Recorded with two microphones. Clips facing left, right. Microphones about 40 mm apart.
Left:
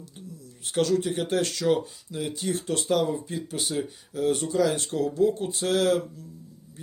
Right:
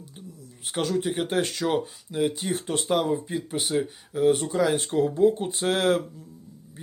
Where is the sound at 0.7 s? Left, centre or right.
Centre.